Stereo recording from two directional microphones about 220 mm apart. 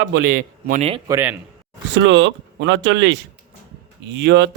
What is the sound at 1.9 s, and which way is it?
Speech, 55° right (ahead or behind).